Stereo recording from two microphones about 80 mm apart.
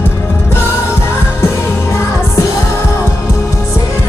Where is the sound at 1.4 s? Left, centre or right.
Left.